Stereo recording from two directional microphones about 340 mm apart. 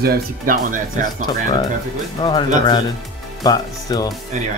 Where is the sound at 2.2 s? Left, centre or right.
Centre.